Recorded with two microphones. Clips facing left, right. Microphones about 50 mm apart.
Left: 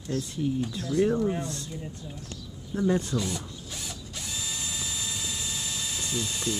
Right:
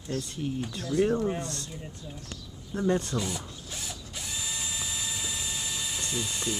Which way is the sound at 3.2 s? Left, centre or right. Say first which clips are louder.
Left 1 dB; centre.